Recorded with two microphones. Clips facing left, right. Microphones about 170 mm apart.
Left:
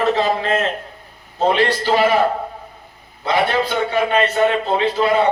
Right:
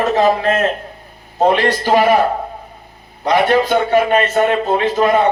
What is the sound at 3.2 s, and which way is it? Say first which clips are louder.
A man's voice: right 5 dB; 45° right (ahead or behind).